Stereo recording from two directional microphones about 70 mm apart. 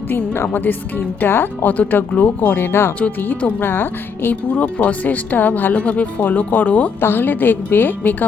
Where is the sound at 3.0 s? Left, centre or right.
Left.